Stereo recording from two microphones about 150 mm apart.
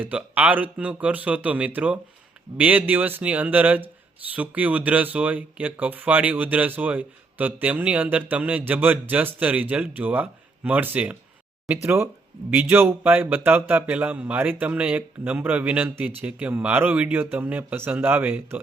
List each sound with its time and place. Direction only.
0.0 s speech: 10° right (ahead or behind)